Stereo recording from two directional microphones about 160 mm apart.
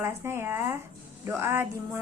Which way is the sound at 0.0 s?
15° right (ahead or behind).